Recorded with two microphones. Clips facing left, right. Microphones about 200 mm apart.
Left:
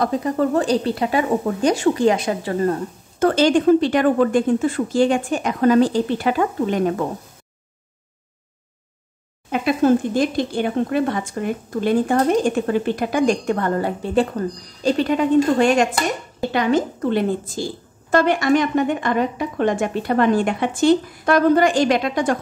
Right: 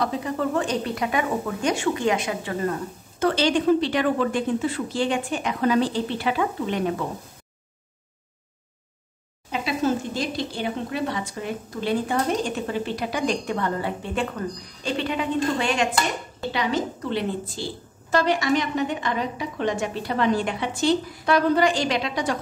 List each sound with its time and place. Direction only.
0.0 s speech: 45° left (ahead or behind)
3.2 s speech: 45° left (ahead or behind)
9.5 s speech: 55° left (ahead or behind)